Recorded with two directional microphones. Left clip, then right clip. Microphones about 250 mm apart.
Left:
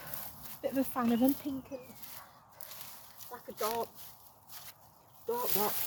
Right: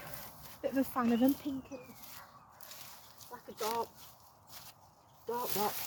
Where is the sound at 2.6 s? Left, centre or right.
Centre.